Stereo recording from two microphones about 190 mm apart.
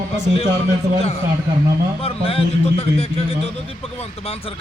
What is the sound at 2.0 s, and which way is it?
A man's voice, 30° left (ahead or behind).